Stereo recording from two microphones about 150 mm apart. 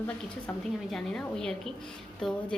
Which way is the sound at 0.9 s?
Centre (ahead or behind).